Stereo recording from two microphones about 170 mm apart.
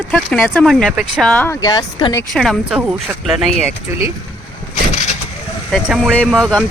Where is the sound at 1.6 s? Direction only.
25° left (ahead or behind).